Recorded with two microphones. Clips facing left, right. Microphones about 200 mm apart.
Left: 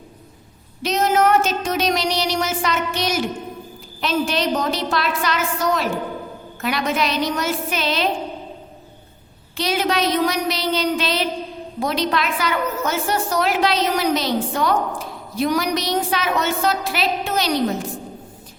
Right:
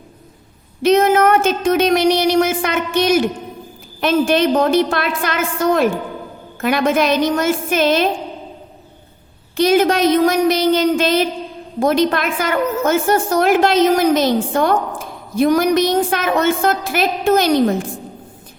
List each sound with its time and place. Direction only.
0.8 s a sound: 55° right (ahead or behind)
4.0 s a woman's voice: 50° right (ahead or behind)
9.6 s a woman's voice: 50° right (ahead or behind)